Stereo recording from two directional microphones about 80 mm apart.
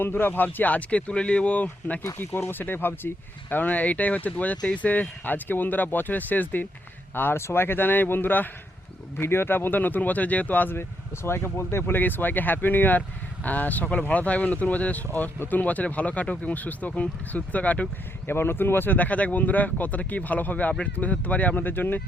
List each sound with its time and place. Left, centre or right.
0.0 s speech: left
18.3 s speech: left